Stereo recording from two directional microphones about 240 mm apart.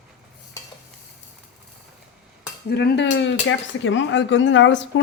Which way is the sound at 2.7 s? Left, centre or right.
Left.